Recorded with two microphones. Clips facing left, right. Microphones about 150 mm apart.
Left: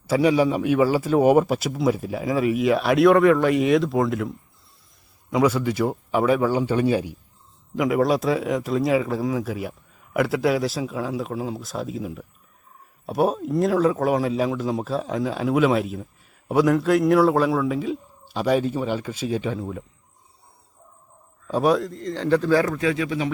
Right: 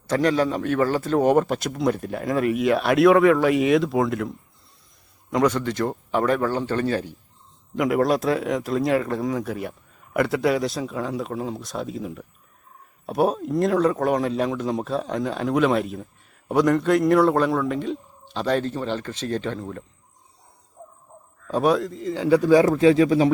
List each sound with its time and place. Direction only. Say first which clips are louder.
0.1 s speech: left 2 dB; 10° left (ahead or behind)
7.8 s speech: even; centre (ahead or behind)
21.4 s speech: even; centre (ahead or behind); by 22.7 s 15° right (ahead or behind)
22.7 s speech: right 8 dB; 30° right (ahead or behind)